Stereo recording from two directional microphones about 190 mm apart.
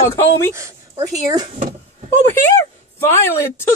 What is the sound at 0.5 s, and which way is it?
Speech, 15° right (ahead or behind).